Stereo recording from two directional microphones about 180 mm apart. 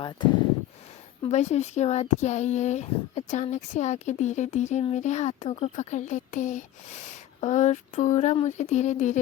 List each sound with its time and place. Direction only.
0.0 s speech: 25° left (ahead or behind)
1.2 s speech: 40° left (ahead or behind)